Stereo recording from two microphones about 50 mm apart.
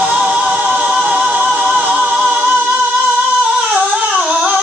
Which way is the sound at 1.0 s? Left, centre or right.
Right.